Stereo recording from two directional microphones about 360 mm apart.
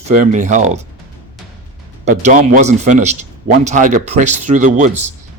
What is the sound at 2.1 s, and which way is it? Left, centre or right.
Speech, right.